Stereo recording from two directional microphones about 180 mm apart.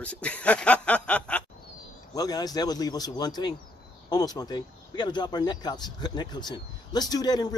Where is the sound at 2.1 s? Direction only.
20° left (ahead or behind).